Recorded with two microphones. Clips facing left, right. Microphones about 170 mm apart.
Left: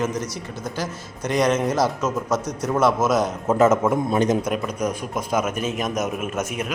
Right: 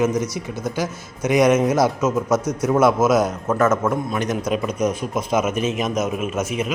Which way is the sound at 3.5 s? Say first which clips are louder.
Left 4 dB; 20° left (ahead or behind).